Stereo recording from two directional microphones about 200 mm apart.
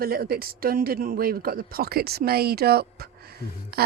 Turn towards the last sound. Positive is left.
turn(degrees=-50)  # may be behind; listen again after turning